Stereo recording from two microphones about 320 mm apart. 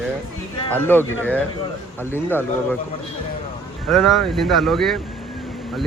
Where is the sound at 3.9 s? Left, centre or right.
Centre.